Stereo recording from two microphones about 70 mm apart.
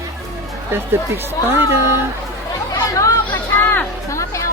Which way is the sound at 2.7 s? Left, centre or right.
Left.